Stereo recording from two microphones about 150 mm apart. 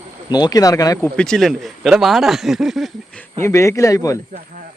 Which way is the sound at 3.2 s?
15° left (ahead or behind).